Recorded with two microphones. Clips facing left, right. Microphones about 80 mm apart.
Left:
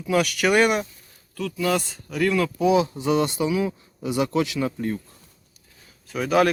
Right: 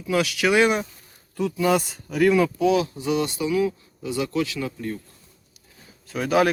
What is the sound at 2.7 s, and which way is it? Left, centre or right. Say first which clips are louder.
Speech: left 2 dB; left.